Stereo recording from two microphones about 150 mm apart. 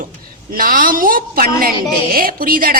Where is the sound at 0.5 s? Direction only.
70° right (ahead or behind).